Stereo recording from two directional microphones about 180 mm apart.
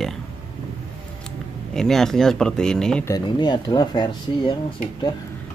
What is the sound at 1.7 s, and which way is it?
Speech, centre (ahead or behind).